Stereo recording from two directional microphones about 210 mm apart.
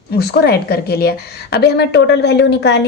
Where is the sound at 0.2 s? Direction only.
50° left (ahead or behind).